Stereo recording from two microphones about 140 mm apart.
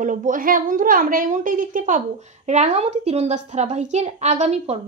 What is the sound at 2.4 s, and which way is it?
A woman's voice, 50° right (ahead or behind).